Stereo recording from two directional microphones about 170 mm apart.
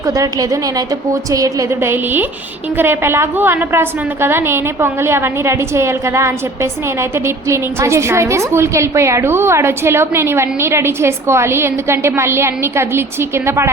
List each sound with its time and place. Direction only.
0.0 s a woman's voice: 20° right (ahead or behind)